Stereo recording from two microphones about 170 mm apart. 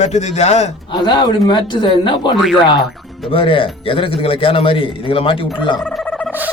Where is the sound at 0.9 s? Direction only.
25° left (ahead or behind).